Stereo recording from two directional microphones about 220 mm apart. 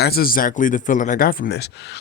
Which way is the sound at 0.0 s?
45° left (ahead or behind).